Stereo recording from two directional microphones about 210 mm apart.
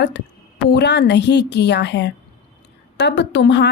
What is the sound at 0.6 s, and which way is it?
A woman's voice, 55° left (ahead or behind).